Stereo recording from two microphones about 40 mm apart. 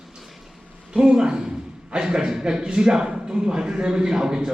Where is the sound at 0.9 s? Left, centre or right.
Centre.